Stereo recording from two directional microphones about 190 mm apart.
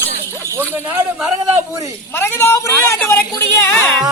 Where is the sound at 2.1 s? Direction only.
10° left (ahead or behind).